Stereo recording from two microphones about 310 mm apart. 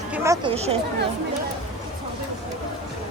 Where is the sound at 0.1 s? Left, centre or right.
Centre.